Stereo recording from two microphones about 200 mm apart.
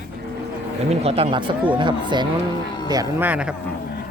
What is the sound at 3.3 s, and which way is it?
Speech, 5° right (ahead or behind).